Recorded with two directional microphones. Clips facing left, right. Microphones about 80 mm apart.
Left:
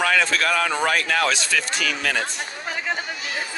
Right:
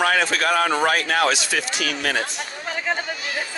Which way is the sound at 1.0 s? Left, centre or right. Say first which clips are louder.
Right 2 dB; right.